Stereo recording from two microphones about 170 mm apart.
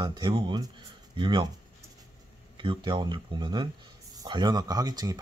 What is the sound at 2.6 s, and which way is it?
Speech, 30° right (ahead or behind).